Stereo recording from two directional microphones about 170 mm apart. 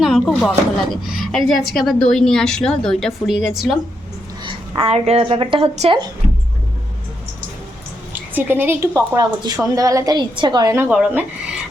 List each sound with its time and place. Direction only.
0.0 s a woman's voice: centre (ahead or behind)
4.4 s a woman's voice: 30° right (ahead or behind)
8.1 s a woman's voice: 10° right (ahead or behind)
10.8 s speech: 10° right (ahead or behind)